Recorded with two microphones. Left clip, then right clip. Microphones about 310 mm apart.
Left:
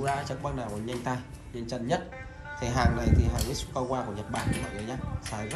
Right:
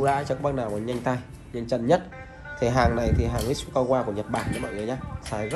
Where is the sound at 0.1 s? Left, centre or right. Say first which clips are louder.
Right 7 dB; centre.